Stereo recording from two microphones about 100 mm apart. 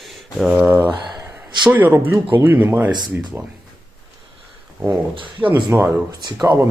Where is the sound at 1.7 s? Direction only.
20° right (ahead or behind).